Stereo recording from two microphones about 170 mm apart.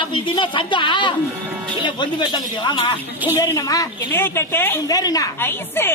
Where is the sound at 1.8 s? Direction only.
25° left (ahead or behind).